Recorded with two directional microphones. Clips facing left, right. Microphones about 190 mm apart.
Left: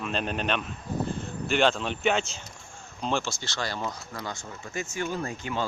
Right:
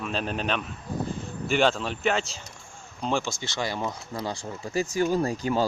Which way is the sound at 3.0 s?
10° right (ahead or behind).